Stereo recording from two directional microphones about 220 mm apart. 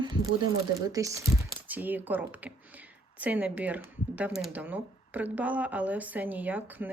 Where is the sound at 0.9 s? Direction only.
15° right (ahead or behind).